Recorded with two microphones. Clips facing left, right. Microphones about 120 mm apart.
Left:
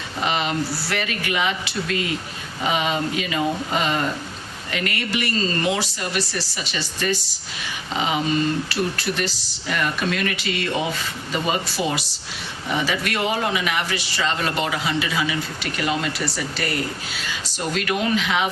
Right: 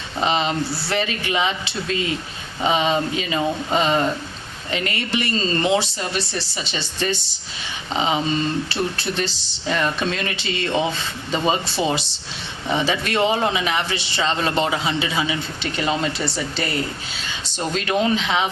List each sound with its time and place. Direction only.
0.2 s a man's voice: 25° right (ahead or behind)